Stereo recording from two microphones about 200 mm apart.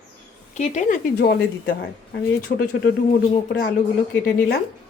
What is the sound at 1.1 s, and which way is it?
Speech, 55° left (ahead or behind).